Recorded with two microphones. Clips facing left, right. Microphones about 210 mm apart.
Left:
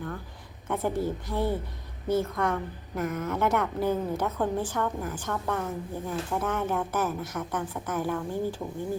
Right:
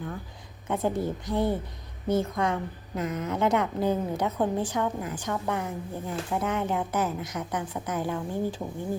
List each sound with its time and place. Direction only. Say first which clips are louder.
0.7 s a woman's voice: right 1 dB; 15° right (ahead or behind)